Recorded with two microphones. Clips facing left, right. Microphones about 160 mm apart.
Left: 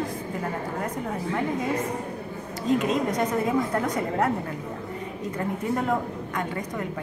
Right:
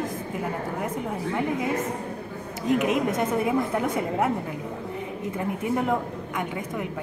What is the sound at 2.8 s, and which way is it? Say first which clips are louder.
A woman's voice: right 1 dB; 20° right (ahead or behind).